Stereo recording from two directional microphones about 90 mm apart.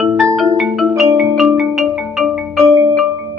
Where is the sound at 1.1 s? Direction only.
Centre (ahead or behind).